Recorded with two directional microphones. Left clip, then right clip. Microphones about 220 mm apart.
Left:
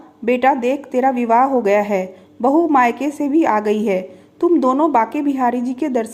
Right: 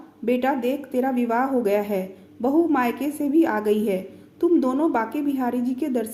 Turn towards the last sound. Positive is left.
turn(degrees=20)  # may be behind; listen again after turning